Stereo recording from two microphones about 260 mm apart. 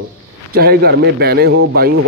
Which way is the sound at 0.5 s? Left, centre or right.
Right.